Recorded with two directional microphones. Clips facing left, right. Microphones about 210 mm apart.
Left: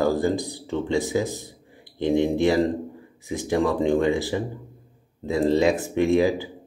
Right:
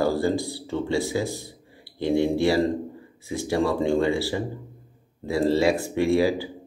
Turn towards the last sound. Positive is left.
turn(degrees=20)  # may be behind; listen again after turning